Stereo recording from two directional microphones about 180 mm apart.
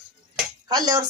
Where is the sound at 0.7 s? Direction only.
20° right (ahead or behind).